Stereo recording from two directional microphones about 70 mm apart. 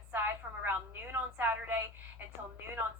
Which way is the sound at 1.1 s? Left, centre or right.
Right.